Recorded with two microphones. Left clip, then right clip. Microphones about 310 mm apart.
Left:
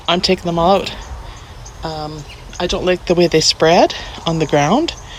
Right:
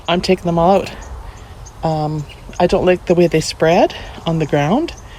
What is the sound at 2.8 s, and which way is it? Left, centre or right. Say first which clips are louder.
Speech: right 1 dB; centre.